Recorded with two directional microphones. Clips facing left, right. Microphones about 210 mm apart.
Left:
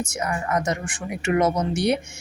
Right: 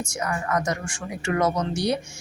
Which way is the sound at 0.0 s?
20° left (ahead or behind).